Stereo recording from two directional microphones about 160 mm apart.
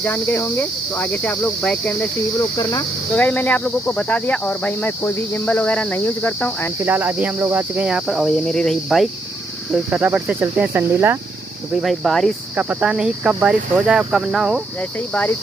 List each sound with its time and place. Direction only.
0.0 s speech: 10° left (ahead or behind)
2.5 s speech: 25° left (ahead or behind)
3.2 s speech: 10° left (ahead or behind)
6.8 s cricket: 10° right (ahead or behind)
11.7 s cricket: centre (ahead or behind)
14.8 s speech: 10° left (ahead or behind)